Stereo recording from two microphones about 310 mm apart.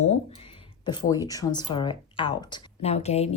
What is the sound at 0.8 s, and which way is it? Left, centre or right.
Speech, centre.